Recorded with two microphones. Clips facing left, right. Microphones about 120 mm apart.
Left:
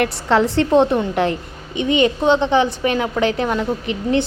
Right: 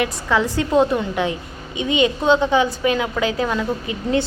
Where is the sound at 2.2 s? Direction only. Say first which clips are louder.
Right 1 dB; 25° left (ahead or behind).